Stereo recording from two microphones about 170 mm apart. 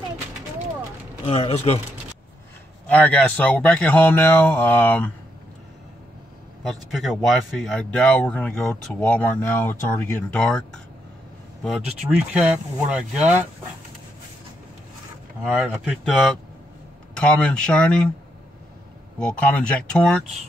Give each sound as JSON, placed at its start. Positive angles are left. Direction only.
{"t": 1.2, "sound": "speech", "side_deg": 35}
{"t": 2.9, "sound": "speech", "side_deg": 10}
{"t": 6.9, "sound": "speech", "side_deg": 0}
{"t": 12.9, "sound": "speech", "side_deg": -5}
{"t": 15.4, "sound": "speech", "side_deg": -5}
{"t": 19.1, "sound": "speech", "side_deg": 5}